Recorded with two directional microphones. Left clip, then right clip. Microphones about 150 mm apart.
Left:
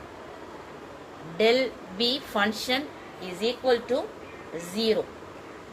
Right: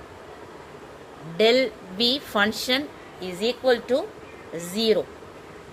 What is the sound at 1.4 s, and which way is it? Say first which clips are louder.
A woman's voice: right 3 dB; 90° right.